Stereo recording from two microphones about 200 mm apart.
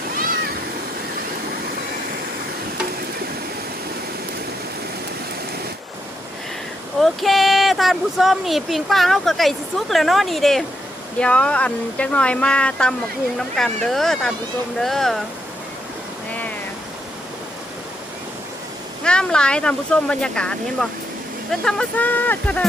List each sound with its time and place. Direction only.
0.1 s a sound: 45° right (ahead or behind)
7.0 s speech: centre (ahead or behind)
19.0 s speech: 5° left (ahead or behind)